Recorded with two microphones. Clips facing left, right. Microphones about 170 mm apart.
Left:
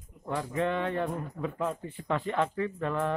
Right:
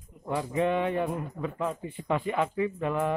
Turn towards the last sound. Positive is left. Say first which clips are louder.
# right 2 dB
turn(degrees=-10)  # may be behind; listen again after turning